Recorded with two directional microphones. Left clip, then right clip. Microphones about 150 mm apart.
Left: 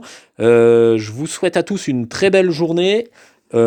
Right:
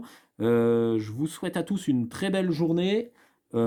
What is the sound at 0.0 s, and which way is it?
Speech, 45° left (ahead or behind).